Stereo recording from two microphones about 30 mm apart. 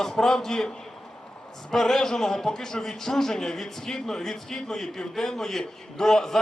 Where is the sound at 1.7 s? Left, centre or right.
Centre.